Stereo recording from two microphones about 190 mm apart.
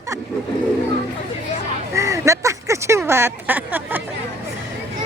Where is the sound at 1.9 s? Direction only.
15° right (ahead or behind).